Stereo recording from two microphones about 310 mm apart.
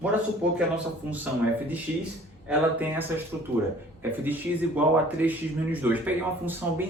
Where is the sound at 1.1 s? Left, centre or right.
Centre.